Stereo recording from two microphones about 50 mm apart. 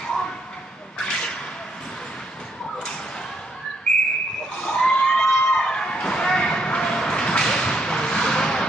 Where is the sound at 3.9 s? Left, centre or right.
Centre.